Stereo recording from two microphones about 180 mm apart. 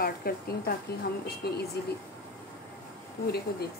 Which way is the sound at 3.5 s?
60° left (ahead or behind).